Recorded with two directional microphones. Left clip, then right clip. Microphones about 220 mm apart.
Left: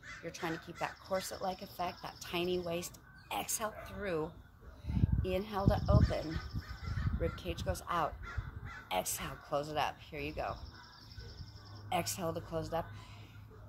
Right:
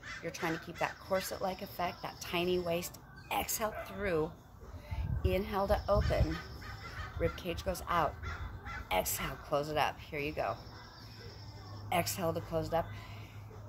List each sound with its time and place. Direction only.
0.2 s speech: 5° left (ahead or behind)
11.9 s speech: 5° left (ahead or behind)